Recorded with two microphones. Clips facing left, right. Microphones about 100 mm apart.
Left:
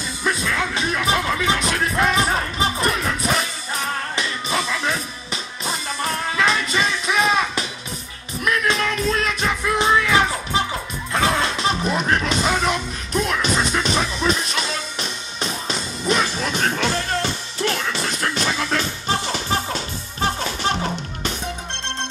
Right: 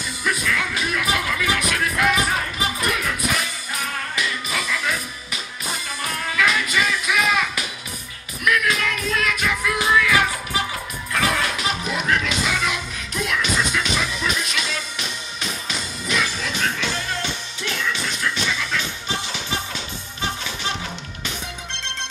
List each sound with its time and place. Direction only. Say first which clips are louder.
0.2 s music: left 1 dB; 25° left (ahead or behind)